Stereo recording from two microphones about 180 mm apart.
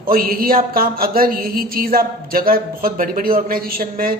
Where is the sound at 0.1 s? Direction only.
55° right (ahead or behind).